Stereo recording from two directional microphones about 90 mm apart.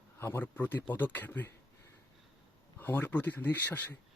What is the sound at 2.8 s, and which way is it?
Speech, 20° left (ahead or behind).